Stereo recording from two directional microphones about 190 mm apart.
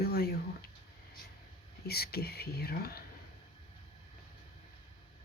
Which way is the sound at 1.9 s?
55° left (ahead or behind).